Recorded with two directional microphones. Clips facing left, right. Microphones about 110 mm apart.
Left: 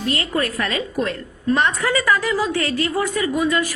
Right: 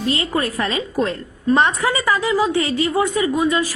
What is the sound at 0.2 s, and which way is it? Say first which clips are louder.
A woman's voice: right 1 dB; 25° right (ahead or behind).